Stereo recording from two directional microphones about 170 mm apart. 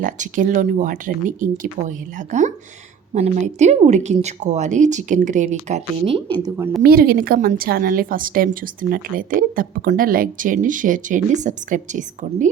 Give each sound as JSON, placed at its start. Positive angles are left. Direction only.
{"t": 0.0, "sound": "a woman's voice", "side_deg": -50}
{"t": 6.8, "sound": "a woman's voice", "side_deg": -60}